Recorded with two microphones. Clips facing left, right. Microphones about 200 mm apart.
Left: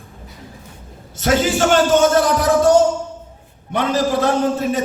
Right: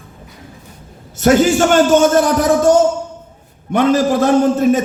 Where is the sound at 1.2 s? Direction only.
50° right (ahead or behind).